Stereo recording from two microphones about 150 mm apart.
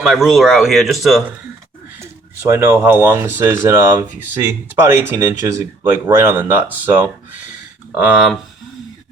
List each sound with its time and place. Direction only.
0.0 s speech: centre (ahead or behind)
2.0 s speech: 15° right (ahead or behind)